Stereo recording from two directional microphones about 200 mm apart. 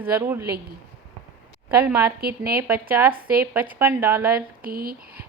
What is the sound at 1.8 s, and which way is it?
Speech, 10° right (ahead or behind).